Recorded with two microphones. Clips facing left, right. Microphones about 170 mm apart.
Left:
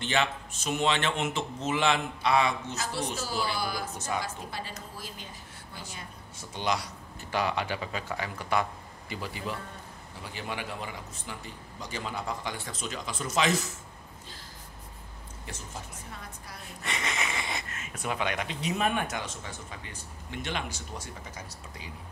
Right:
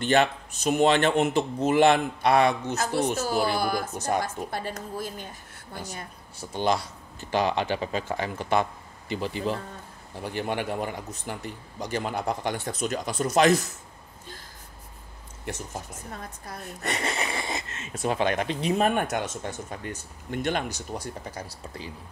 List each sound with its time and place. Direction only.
0.0 s a man's voice: 50° right (ahead or behind)
1.6 s a man's voice: 55° right (ahead or behind)
5.8 s speech: 40° right (ahead or behind)
6.5 s speech: 30° right (ahead or behind)
10.2 s a man's voice: 55° right (ahead or behind)
15.4 s a man's voice: 50° right (ahead or behind)
21.5 s speech: 30° right (ahead or behind)